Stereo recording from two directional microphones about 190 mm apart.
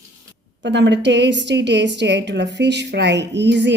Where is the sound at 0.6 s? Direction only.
65° right (ahead or behind).